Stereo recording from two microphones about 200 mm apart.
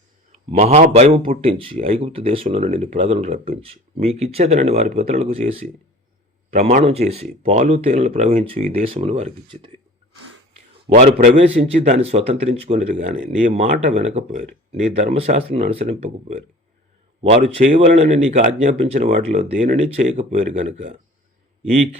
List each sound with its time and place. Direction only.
0.3 s speech: 35° right (ahead or behind)
10.8 s speech: 30° right (ahead or behind)